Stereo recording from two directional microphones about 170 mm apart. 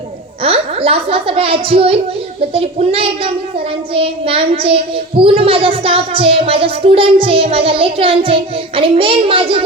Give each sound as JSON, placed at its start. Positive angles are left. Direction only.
{"t": 0.4, "sound": "speech", "side_deg": -35}